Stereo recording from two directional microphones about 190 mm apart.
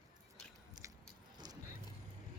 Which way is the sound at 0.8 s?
20° right (ahead or behind).